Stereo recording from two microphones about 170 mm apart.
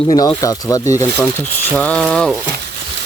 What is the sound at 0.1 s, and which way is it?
Speech, 20° left (ahead or behind).